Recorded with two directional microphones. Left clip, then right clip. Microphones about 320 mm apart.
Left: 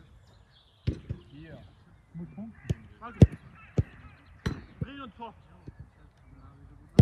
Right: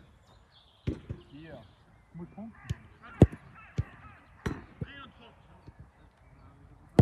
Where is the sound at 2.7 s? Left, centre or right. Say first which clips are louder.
Left 6 dB; centre.